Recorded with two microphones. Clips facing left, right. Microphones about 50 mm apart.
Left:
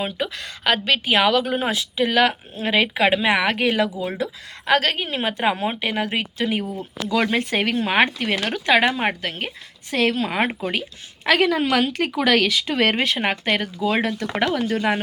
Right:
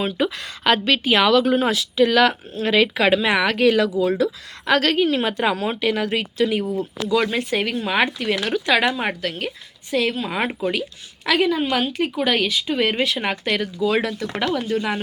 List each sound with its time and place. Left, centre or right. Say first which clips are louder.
0.2 s speech: right 4 dB; centre; by 9.5 s left
9.9 s speech: left 1 dB; left
13.1 s speech: left 1 dB; left